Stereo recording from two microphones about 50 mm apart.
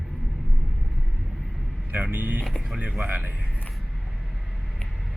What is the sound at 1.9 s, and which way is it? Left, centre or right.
Speech, right.